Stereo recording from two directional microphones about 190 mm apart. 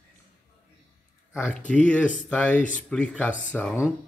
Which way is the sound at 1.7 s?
5° left (ahead or behind).